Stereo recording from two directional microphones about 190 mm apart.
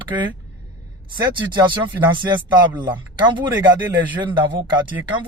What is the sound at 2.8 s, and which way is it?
Speech, 25° right (ahead or behind).